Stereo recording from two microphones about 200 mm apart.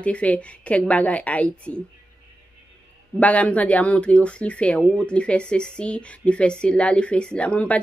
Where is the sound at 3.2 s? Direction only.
5° left (ahead or behind).